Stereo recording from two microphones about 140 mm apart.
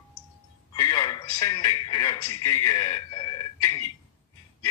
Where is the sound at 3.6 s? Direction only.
20° left (ahead or behind).